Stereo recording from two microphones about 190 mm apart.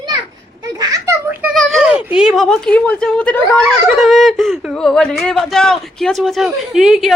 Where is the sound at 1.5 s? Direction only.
Centre (ahead or behind).